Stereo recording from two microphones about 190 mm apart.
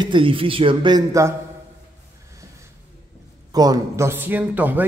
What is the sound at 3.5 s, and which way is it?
Speech, 20° right (ahead or behind).